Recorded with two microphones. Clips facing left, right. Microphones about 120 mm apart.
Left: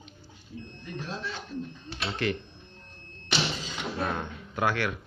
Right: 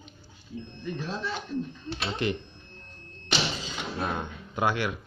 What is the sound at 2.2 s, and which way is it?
Speech, 20° right (ahead or behind).